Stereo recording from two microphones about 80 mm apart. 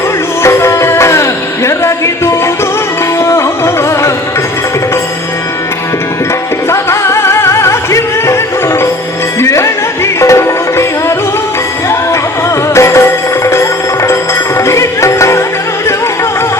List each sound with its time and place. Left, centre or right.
0.4 s music: left
6.7 s music: left
12.7 s music: left